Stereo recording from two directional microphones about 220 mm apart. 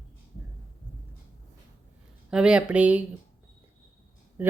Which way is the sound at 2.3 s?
5° right (ahead or behind).